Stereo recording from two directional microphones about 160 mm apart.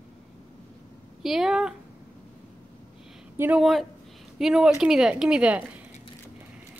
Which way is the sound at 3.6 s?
Centre (ahead or behind).